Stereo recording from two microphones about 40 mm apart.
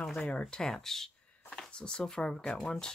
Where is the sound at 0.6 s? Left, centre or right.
Centre.